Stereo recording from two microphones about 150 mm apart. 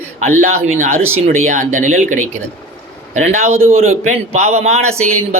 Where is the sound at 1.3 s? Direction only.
60° right (ahead or behind).